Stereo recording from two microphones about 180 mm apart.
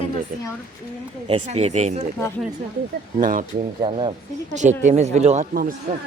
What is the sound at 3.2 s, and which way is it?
Speech, 50° right (ahead or behind).